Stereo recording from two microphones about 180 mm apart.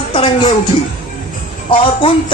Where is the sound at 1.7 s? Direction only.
30° left (ahead or behind).